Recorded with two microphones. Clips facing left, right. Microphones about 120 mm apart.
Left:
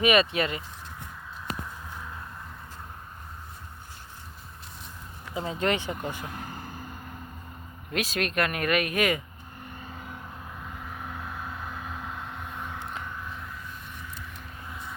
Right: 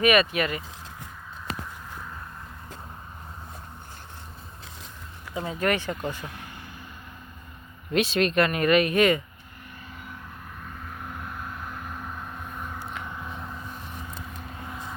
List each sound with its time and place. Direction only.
0.0 s speech: 25° left (ahead or behind)
5.3 s speech: 25° left (ahead or behind)
6.3 s vehicle: 40° left (ahead or behind)
7.9 s speech: centre (ahead or behind)
11.4 s vehicle: 5° left (ahead or behind)
13.1 s vehicle: 20° right (ahead or behind)
13.9 s vehicle: 35° right (ahead or behind)